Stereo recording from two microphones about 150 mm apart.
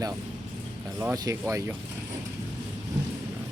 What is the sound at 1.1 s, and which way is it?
Speech, 20° right (ahead or behind).